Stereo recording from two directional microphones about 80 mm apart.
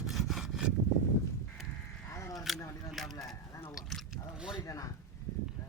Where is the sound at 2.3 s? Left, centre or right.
Centre.